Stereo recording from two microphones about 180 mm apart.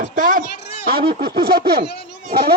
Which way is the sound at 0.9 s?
55° right (ahead or behind).